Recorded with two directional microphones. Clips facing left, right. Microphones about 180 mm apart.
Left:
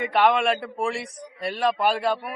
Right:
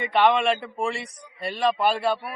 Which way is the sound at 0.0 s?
Centre (ahead or behind).